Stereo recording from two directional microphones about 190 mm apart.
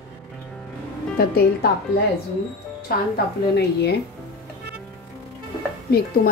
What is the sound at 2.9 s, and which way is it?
A woman's voice, 55° left (ahead or behind).